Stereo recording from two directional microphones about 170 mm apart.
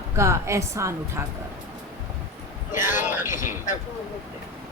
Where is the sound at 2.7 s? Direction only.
15° right (ahead or behind).